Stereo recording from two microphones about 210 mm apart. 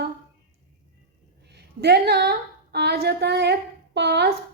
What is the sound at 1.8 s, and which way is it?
A woman's voice, 50° right (ahead or behind).